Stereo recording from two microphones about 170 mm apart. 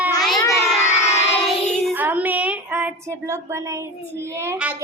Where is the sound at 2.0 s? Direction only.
10° right (ahead or behind).